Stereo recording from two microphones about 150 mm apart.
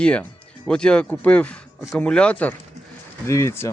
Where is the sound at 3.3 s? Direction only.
20° left (ahead or behind).